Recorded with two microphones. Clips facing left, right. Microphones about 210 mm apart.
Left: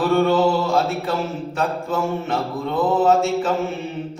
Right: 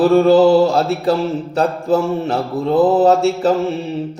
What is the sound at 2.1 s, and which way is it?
Mantra, 35° right (ahead or behind).